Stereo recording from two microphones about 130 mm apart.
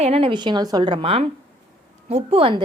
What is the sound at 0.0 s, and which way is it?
Speech, 45° right (ahead or behind).